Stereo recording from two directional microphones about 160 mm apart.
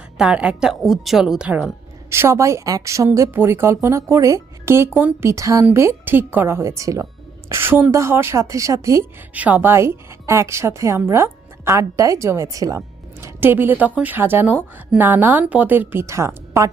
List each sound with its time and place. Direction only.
0.2 s a woman's voice: 5° right (ahead or behind)